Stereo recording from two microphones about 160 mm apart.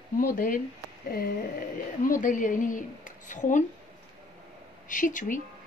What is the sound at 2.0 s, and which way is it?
Speech, 55° left (ahead or behind).